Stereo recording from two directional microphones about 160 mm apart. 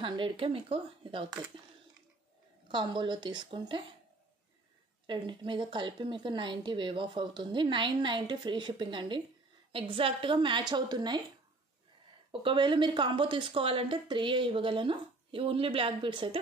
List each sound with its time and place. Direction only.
0.0 s a woman's voice: 30° right (ahead or behind)
2.7 s a woman's voice: 30° right (ahead or behind)
5.0 s a woman's voice: 30° right (ahead or behind)
12.3 s a woman's voice: 30° right (ahead or behind)